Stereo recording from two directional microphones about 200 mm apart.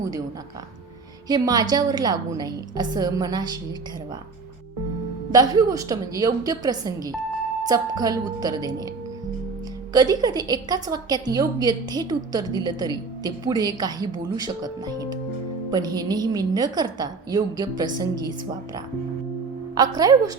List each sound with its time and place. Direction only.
0.0 s speech: 15° right (ahead or behind)
1.3 s a woman's voice: 20° right (ahead or behind)
5.3 s a woman's voice: 20° right (ahead or behind)
9.9 s a woman's voice: 20° right (ahead or behind)